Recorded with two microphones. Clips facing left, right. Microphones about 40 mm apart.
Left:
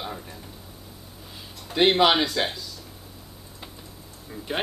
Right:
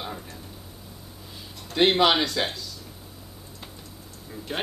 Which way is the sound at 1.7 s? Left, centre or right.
Centre.